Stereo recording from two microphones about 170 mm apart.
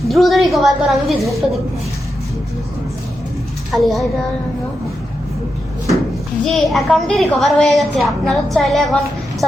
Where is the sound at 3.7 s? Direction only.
Centre (ahead or behind).